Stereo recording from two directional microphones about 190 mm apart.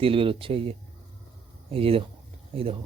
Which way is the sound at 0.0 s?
30° right (ahead or behind).